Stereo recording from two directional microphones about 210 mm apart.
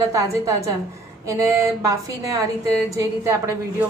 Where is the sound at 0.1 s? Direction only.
15° right (ahead or behind).